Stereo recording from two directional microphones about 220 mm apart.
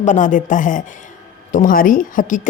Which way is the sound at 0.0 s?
35° left (ahead or behind).